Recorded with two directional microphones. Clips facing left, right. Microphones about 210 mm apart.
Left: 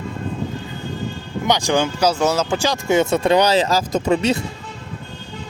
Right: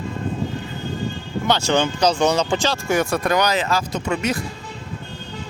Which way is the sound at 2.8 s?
20° left (ahead or behind).